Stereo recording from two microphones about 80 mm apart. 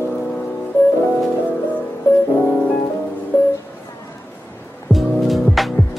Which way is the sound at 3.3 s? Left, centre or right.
Left.